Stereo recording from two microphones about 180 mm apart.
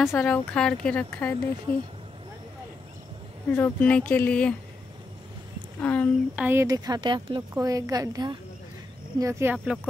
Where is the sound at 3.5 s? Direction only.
10° left (ahead or behind).